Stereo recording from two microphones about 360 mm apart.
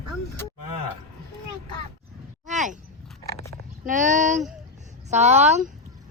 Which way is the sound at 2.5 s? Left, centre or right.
Centre.